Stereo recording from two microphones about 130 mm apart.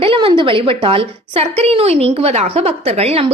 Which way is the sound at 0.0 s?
45° right (ahead or behind).